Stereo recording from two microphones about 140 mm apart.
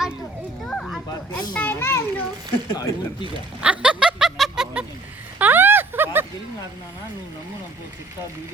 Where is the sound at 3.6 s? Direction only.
5° right (ahead or behind).